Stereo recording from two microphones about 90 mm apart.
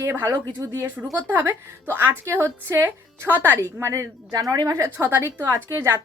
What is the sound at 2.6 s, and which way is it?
A woman's voice, 35° right (ahead or behind).